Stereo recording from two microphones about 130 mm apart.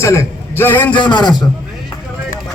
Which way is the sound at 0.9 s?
35° left (ahead or behind).